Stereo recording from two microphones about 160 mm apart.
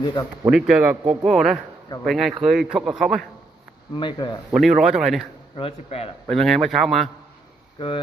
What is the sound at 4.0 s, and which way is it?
Speech, 30° left (ahead or behind).